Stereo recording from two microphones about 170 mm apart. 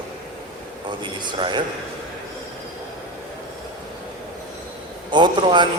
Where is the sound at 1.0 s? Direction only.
25° right (ahead or behind).